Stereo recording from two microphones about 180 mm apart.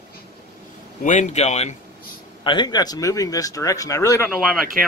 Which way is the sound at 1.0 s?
40° left (ahead or behind).